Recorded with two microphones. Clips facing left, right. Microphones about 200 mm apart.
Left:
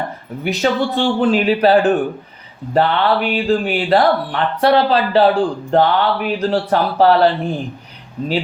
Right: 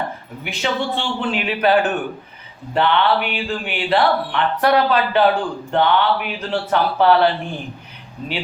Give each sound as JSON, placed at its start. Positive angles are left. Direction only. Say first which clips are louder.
{"t": 0.4, "sound": "speech", "louder": "left 6 dB", "side_deg": 40}